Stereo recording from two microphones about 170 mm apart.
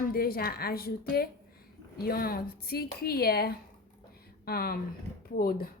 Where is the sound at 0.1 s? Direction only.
65° left (ahead or behind).